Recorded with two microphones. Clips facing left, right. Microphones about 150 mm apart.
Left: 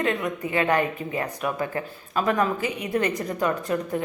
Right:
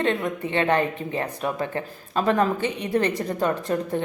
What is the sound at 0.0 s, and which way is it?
A woman's voice, 30° right (ahead or behind).